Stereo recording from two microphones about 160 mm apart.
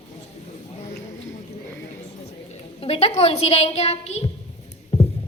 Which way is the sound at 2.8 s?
40° left (ahead or behind).